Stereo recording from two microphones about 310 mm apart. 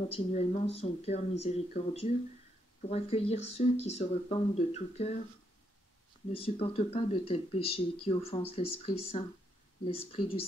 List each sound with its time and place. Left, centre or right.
0.1 s speech: centre
6.3 s speech: centre